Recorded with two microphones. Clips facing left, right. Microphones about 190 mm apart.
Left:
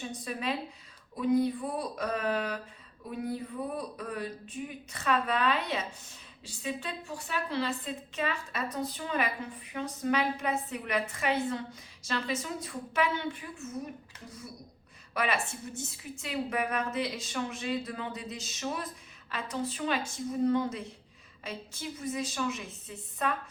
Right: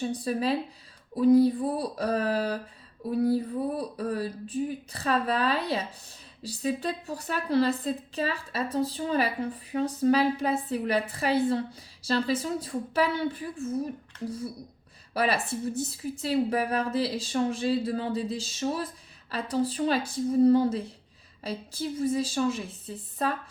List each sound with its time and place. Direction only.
0.0 s speech: 35° right (ahead or behind)